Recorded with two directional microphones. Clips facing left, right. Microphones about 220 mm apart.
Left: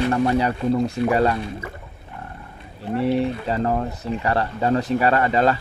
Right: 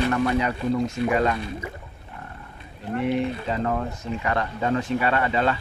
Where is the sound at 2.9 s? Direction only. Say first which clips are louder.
Left 3 dB; 35° left (ahead or behind).